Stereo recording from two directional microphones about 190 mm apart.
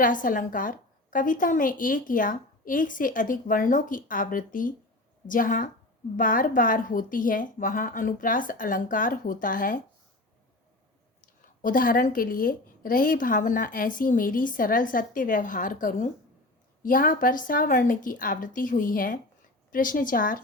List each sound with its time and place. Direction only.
0.0 s a woman's voice: 45° left (ahead or behind)
11.6 s a woman's voice: 45° left (ahead or behind)